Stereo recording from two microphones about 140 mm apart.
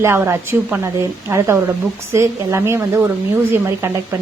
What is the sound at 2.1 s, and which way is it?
A woman's voice, 20° right (ahead or behind).